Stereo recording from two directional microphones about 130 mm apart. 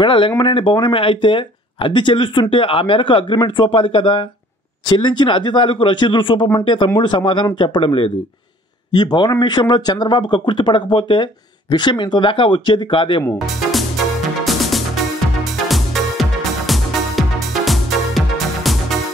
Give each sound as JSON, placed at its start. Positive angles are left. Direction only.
{"t": 0.0, "sound": "speech", "side_deg": 40}
{"t": 8.9, "sound": "speech", "side_deg": 35}
{"t": 13.5, "sound": "music", "side_deg": 0}